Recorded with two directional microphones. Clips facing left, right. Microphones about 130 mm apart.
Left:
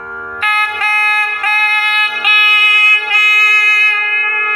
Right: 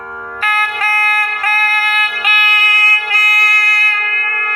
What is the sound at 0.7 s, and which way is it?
Music, 40° right (ahead or behind).